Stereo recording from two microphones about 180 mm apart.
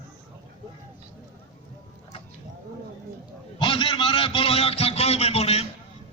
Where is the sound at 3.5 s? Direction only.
25° left (ahead or behind).